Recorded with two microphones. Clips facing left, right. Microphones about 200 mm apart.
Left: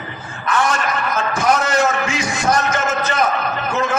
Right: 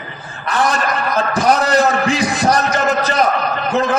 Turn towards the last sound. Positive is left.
turn(degrees=-35)  # may be behind; listen again after turning